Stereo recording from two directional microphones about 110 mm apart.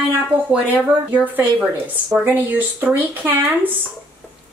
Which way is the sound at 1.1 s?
15° right (ahead or behind).